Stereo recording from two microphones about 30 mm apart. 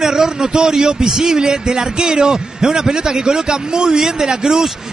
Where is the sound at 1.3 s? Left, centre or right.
Right.